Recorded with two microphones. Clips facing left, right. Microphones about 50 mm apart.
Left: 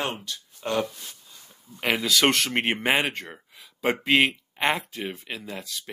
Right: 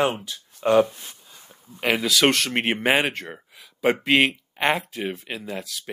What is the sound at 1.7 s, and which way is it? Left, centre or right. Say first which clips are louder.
Speech: right 2 dB; centre.